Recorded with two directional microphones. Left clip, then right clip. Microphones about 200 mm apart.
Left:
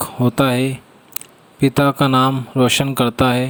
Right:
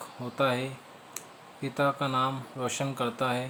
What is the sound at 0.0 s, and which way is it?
Speech, 45° left (ahead or behind).